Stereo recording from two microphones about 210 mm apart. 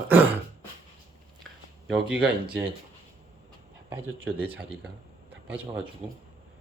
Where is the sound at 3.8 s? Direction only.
10° right (ahead or behind).